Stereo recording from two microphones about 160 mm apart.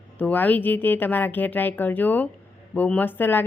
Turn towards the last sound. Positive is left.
turn(degrees=10)  # may be behind; listen again after turning